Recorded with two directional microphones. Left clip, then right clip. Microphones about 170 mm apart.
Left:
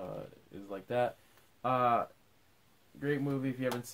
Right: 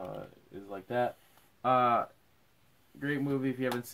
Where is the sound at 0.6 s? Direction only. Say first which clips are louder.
Right 1 dB; 15° left (ahead or behind).